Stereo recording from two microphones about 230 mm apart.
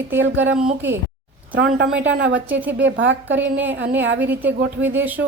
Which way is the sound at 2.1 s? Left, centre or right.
Right.